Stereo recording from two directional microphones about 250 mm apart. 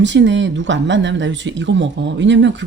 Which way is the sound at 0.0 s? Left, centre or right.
Right.